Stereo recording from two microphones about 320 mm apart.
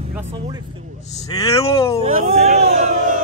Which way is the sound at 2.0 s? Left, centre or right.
Right.